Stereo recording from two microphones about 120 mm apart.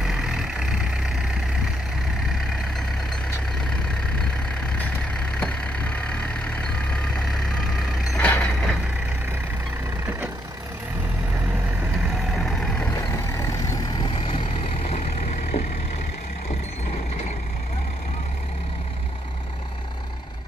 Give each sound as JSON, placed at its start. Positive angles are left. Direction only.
{"t": 0.0, "sound": "vehicle", "side_deg": -5}
{"t": 5.4, "sound": "vehicle", "side_deg": 10}
{"t": 8.2, "sound": "reversing beeps", "side_deg": 10}
{"t": 12.4, "sound": "vehicle", "side_deg": 0}
{"t": 12.9, "sound": "vehicle", "side_deg": 30}
{"t": 13.9, "sound": "vehicle", "side_deg": 45}